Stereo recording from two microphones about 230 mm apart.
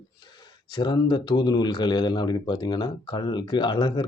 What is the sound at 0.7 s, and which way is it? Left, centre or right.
Speech, centre.